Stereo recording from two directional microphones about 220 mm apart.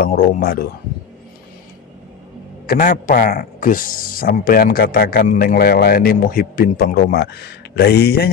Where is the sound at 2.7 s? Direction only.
40° left (ahead or behind).